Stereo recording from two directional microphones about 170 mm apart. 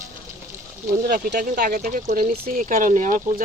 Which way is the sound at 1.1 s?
55° right (ahead or behind).